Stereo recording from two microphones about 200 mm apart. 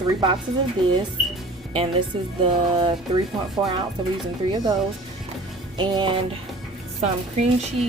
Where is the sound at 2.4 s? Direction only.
25° right (ahead or behind).